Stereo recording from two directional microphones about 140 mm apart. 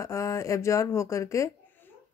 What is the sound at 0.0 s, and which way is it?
Speech, 20° left (ahead or behind).